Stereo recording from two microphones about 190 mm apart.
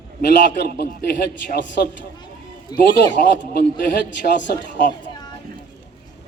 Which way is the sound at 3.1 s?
45° left (ahead or behind).